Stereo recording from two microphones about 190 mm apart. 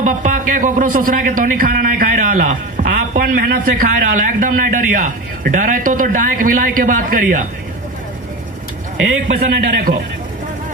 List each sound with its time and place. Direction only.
0.0 s a man's voice: 40° right (ahead or behind)
9.2 s a man's voice: 50° right (ahead or behind)